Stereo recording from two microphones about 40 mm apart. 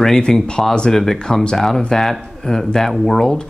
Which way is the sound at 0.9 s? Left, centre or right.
Centre.